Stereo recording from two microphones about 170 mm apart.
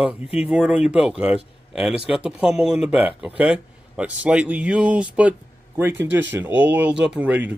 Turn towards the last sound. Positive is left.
turn(degrees=-10)  # may be behind; listen again after turning